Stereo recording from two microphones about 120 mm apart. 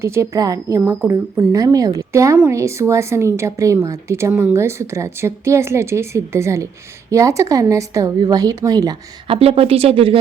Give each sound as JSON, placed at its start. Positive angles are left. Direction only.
{"t": 0.0, "sound": "a woman's voice", "side_deg": -20}
{"t": 9.2, "sound": "speech", "side_deg": -55}